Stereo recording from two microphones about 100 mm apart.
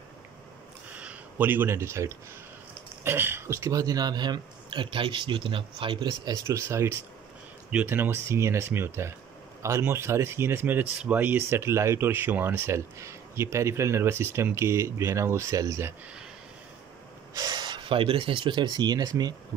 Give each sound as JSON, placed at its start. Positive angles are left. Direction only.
{"t": 0.9, "sound": "speech", "side_deg": -15}
{"t": 6.3, "sound": "speech", "side_deg": -30}
{"t": 17.3, "sound": "speech", "side_deg": -40}